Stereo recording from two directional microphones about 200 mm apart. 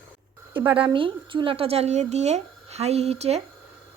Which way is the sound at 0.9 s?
25° right (ahead or behind).